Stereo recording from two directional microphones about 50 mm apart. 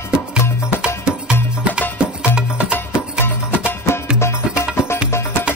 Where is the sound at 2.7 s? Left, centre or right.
Left.